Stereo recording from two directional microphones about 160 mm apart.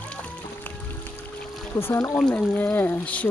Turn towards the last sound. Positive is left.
turn(degrees=10)  # may be behind; listen again after turning